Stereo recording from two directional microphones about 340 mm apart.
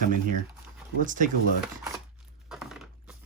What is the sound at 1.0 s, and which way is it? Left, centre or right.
Speech, right.